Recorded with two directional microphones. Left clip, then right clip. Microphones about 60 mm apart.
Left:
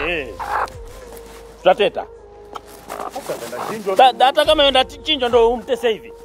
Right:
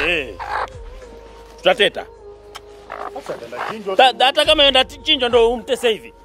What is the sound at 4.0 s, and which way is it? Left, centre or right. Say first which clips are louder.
Speech: left 1 dB; right.